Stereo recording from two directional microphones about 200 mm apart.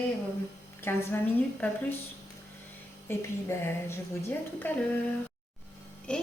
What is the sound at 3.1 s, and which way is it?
A woman's voice, 10° left (ahead or behind).